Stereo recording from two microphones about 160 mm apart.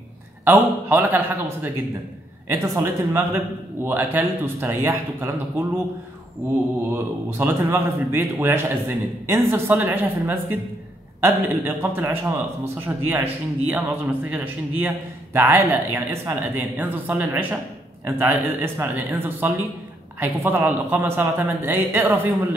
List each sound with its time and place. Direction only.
0.5 s a man's voice: 15° right (ahead or behind)
6.9 s a man's voice: 15° right (ahead or behind)